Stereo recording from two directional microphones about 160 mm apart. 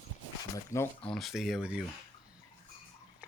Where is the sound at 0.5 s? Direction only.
20° left (ahead or behind).